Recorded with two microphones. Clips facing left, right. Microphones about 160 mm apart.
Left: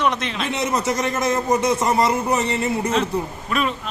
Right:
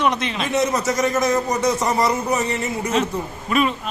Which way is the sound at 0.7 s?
25° left (ahead or behind).